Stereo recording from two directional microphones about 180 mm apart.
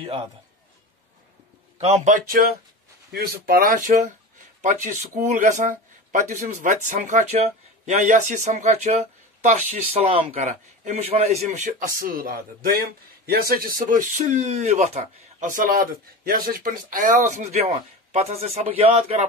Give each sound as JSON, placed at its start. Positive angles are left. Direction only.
{"t": 0.0, "sound": "a man's voice", "side_deg": -30}
{"t": 1.9, "sound": "speech", "side_deg": -40}